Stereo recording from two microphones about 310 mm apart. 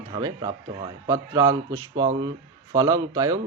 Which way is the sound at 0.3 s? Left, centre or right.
Centre.